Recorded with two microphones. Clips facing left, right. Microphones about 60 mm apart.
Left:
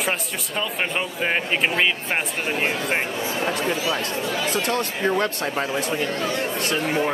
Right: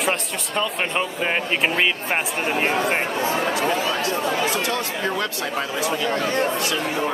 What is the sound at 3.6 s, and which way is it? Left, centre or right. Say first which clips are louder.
Speech: right 2 dB; right.